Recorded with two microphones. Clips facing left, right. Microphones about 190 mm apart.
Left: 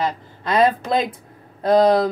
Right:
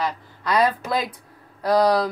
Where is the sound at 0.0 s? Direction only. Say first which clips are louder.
Left 3 dB; 25° left (ahead or behind).